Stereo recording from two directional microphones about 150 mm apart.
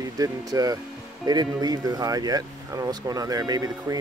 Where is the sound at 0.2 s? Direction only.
25° right (ahead or behind).